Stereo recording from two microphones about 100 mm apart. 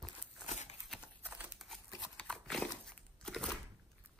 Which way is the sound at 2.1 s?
5° left (ahead or behind).